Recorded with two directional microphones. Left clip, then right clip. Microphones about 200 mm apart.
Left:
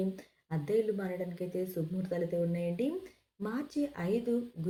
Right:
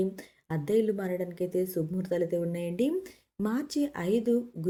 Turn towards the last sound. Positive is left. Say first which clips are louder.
# right 6 dB
turn(degrees=-45)  # may be behind; listen again after turning